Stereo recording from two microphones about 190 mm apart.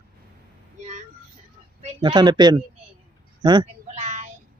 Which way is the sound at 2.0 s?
25° right (ahead or behind).